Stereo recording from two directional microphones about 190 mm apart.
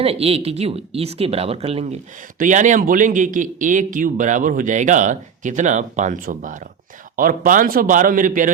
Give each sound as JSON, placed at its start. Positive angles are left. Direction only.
{"t": 0.0, "sound": "speech", "side_deg": -30}